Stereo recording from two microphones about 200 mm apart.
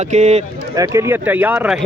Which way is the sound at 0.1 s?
35° right (ahead or behind).